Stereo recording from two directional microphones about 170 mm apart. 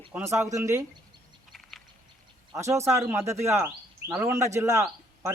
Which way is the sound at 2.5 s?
15° right (ahead or behind).